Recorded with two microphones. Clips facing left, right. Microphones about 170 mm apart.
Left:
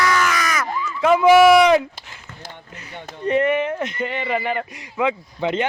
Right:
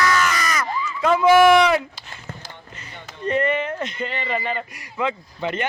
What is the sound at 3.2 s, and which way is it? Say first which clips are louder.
Speech: left 3 dB; 15° left (ahead or behind).